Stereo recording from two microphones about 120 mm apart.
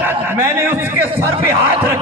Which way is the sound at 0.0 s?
20° right (ahead or behind).